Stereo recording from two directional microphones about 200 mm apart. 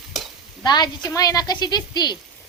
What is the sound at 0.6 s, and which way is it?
A woman's voice, 20° left (ahead or behind).